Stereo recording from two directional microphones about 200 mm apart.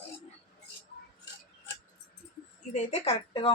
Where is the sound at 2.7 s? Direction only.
30° left (ahead or behind).